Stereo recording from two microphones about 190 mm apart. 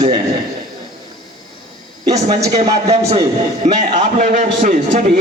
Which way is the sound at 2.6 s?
35° right (ahead or behind).